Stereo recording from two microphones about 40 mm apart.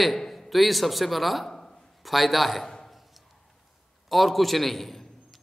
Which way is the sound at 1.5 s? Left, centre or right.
Centre.